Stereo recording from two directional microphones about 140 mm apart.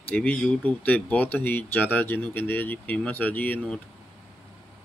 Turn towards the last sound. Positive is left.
turn(degrees=10)  # may be behind; listen again after turning